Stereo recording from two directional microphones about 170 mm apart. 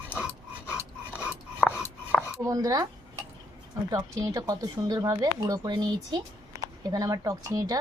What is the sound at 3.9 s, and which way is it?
Speech, 20° right (ahead or behind).